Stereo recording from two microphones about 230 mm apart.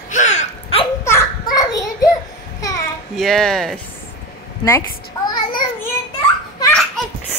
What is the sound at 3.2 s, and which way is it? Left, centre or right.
Speech, centre.